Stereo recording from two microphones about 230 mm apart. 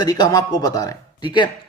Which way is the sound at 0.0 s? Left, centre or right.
Centre.